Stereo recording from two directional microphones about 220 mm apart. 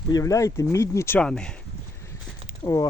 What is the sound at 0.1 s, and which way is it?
Speech, 15° left (ahead or behind).